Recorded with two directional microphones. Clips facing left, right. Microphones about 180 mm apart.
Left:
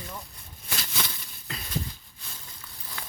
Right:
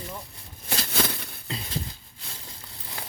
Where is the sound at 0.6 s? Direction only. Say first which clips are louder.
Right 5 dB; 35° right (ahead or behind).